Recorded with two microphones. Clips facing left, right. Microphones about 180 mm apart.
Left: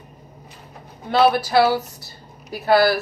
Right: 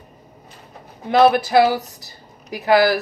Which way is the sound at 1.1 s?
15° right (ahead or behind).